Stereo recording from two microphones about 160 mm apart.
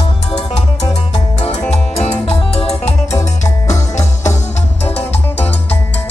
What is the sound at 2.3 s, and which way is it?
Music, 40° left (ahead or behind).